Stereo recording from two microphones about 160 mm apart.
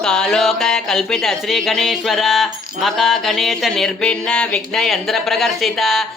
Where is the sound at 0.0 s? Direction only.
5° left (ahead or behind).